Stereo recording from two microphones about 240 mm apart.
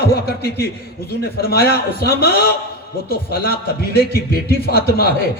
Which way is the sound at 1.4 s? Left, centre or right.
Left.